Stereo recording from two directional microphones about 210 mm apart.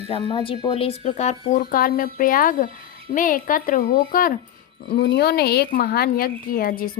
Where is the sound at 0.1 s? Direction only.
25° left (ahead or behind); by 4.4 s 40° left (ahead or behind).